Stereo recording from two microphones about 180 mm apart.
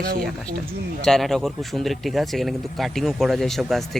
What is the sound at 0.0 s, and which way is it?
Speech, 55° right (ahead or behind).